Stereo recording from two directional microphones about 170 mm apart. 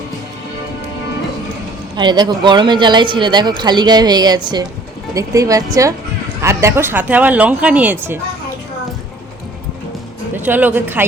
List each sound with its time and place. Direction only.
2.0 s speech: 25° right (ahead or behind)
10.3 s speech: 10° right (ahead or behind)